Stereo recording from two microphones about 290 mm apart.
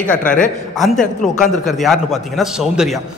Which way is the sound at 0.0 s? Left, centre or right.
Left.